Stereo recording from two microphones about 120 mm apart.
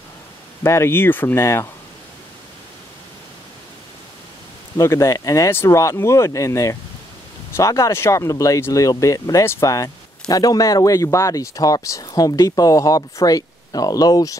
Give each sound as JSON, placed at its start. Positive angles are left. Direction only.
{"t": 0.7, "sound": "speech", "side_deg": 20}
{"t": 4.7, "sound": "speech", "side_deg": 25}